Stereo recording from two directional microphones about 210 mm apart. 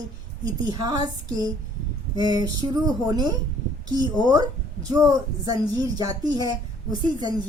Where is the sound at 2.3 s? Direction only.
20° right (ahead or behind).